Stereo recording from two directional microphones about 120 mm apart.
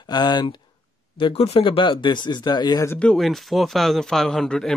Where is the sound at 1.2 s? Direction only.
50° left (ahead or behind).